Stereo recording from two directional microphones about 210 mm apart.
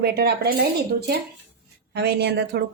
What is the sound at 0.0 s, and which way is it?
A woman's voice, 50° right (ahead or behind).